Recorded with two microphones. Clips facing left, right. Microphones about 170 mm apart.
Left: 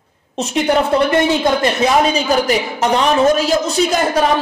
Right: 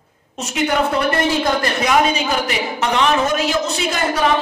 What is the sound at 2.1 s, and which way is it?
A woman's voice, 40° left (ahead or behind).